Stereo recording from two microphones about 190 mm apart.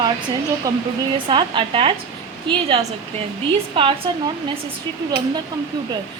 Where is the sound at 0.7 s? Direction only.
20° right (ahead or behind).